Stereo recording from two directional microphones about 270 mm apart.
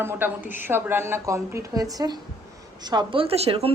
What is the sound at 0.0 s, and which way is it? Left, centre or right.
A woman's voice, centre.